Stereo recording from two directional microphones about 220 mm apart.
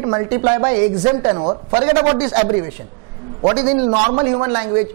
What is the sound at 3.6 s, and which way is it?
A woman's voice, 30° right (ahead or behind).